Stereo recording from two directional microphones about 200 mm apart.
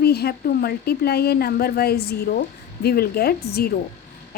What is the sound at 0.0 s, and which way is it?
A woman's voice, 50° left (ahead or behind).